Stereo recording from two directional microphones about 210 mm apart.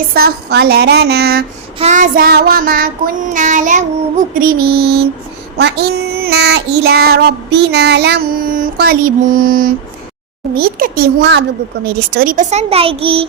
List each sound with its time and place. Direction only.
0.1 s child singing: 50° right (ahead or behind)
1.8 s child singing: 35° right (ahead or behind)
3.3 s a child's voice: 35° right (ahead or behind)
4.4 s child singing: 45° right (ahead or behind)
11.9 s a child's voice: 45° right (ahead or behind); by 13.2 s 25° right (ahead or behind)